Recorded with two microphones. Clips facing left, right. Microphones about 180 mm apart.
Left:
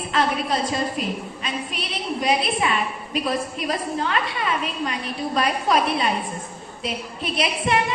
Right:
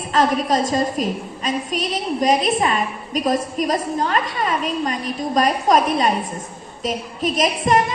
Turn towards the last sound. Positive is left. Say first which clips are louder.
# right 5 dB
turn(degrees=-40)  # may be behind; listen again after turning